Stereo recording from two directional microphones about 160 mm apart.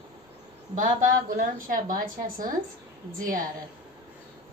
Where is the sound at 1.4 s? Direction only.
60° right (ahead or behind).